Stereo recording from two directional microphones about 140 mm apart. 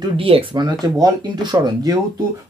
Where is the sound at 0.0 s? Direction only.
40° right (ahead or behind).